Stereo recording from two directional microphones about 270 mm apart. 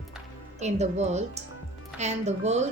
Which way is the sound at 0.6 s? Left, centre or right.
Right.